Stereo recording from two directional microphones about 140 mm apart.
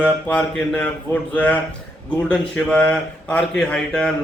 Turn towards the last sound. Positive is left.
turn(degrees=5)  # may be behind; listen again after turning